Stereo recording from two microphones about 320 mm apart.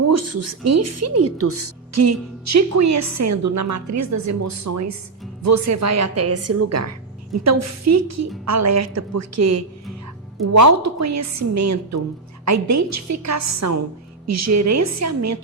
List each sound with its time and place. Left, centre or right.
0.0 s a woman's voice: right